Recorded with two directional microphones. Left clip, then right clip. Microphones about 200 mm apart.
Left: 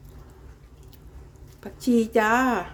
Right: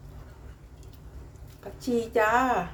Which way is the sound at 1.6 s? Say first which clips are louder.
Left 5 dB; 60° left (ahead or behind).